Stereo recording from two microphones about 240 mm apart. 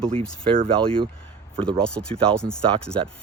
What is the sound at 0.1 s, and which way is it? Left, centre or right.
Speech, right.